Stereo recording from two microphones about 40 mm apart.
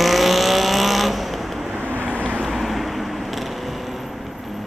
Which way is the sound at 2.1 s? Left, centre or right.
Right.